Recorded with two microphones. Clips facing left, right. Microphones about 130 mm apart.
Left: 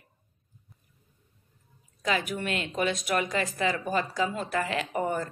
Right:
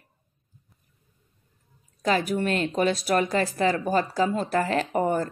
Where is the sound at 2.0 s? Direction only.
40° right (ahead or behind).